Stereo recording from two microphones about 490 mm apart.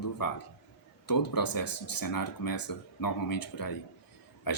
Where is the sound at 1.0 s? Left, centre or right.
Left.